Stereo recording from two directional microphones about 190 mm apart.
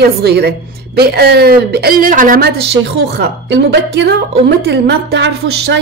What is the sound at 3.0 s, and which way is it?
A woman's voice, 65° right (ahead or behind).